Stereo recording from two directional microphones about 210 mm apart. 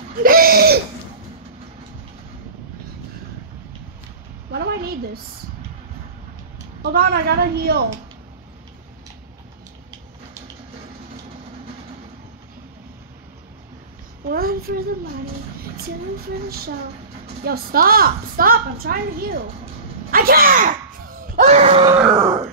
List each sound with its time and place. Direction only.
0.1 s a sound: 45° right (ahead or behind)
4.5 s a sound: 50° right (ahead or behind)
6.8 s a woman's voice: 45° right (ahead or behind)
14.2 s a child's voice: 45° right (ahead or behind)
16.4 s a woman's voice: 45° right (ahead or behind)
20.1 s screaming: 45° right (ahead or behind)
21.8 s grunt: 15° right (ahead or behind)